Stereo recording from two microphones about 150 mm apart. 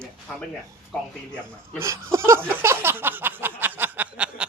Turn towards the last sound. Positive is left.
turn(degrees=-10)  # may be behind; listen again after turning